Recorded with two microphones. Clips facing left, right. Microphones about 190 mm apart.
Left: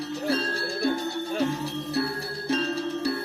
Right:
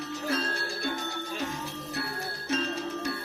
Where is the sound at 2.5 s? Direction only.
35° left (ahead or behind).